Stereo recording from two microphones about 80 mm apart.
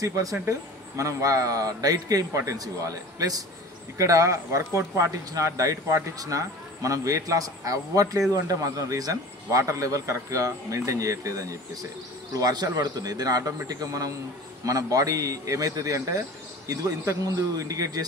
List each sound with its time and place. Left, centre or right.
0.0 s speech: right